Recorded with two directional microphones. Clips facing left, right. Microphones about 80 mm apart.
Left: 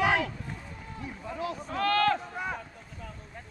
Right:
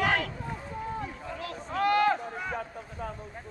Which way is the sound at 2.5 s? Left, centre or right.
Right.